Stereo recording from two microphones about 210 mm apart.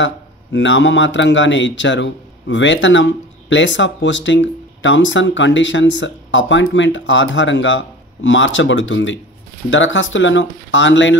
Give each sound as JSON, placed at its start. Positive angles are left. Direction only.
{"t": 0.0, "sound": "a man's voice", "side_deg": 60}